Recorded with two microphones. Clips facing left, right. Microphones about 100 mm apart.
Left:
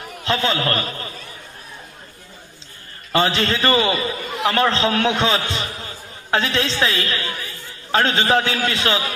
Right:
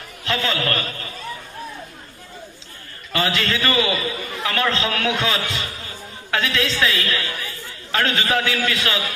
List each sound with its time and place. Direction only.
0.2 s a man's voice: 30° left (ahead or behind)
3.1 s a man's voice: 30° left (ahead or behind)